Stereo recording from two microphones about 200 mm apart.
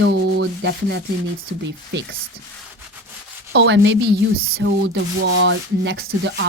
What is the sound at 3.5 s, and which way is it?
A woman's voice, 65° right (ahead or behind).